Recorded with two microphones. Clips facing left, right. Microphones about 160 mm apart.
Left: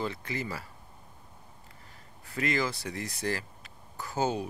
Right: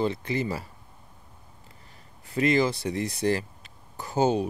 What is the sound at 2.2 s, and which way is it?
Speech, 20° right (ahead or behind).